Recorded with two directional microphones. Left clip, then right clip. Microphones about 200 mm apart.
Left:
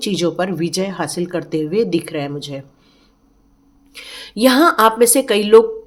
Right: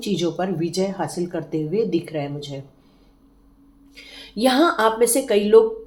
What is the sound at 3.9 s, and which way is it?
Speech, 40° left (ahead or behind).